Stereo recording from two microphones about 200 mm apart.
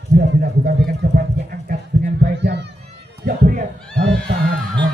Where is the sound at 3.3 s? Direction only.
45° right (ahead or behind).